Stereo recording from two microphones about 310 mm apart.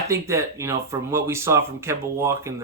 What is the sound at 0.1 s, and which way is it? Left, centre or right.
Speech, centre.